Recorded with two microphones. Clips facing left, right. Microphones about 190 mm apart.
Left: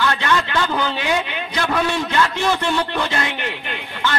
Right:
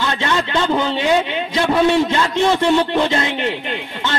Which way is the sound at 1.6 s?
20° right (ahead or behind).